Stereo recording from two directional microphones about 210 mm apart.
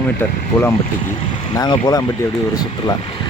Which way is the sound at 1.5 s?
20° left (ahead or behind).